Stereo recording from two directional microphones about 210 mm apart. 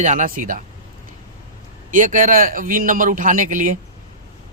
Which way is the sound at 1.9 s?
35° right (ahead or behind).